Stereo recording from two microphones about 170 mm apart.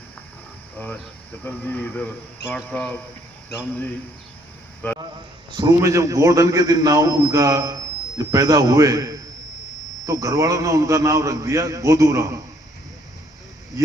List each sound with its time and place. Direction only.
0.8 s cricket: 10° left (ahead or behind)
1.5 s speech: 10° left (ahead or behind)
4.8 s a sound: 10° left (ahead or behind)
5.5 s a man's voice: 25° right (ahead or behind)
13.7 s speech: 20° right (ahead or behind)